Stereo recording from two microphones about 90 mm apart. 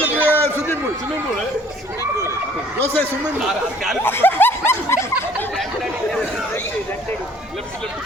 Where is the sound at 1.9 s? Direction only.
35° right (ahead or behind).